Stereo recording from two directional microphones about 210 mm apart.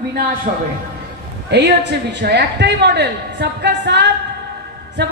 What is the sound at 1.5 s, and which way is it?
A woman's voice, 55° right (ahead or behind).